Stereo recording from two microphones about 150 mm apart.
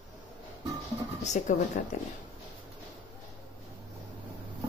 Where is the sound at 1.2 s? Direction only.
50° left (ahead or behind).